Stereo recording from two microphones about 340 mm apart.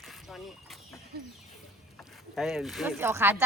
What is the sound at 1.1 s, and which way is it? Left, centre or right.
Speech, right.